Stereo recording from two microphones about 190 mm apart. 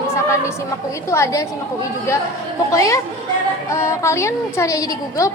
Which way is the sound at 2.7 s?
15° left (ahead or behind).